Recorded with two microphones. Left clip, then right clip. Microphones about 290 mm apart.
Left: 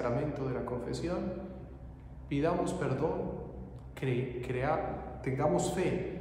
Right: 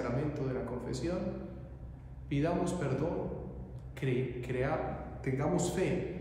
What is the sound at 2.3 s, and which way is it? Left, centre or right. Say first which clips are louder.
Speech: left 2 dB; centre.